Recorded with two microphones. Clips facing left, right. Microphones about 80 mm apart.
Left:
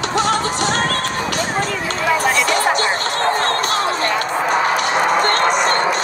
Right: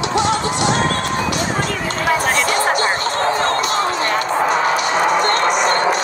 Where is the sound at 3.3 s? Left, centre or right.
Left.